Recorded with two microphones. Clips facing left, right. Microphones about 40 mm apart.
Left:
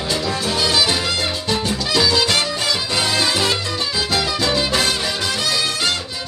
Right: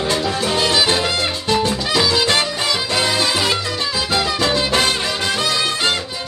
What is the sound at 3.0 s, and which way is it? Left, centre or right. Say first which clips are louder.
Music: even; centre.